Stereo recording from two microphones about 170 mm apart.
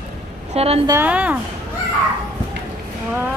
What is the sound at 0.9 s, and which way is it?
Speech, 10° right (ahead or behind).